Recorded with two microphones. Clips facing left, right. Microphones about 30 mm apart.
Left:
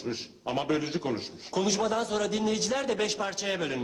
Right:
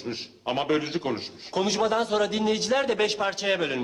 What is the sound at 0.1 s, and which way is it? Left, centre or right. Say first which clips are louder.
A man's voice: right 3 dB; right.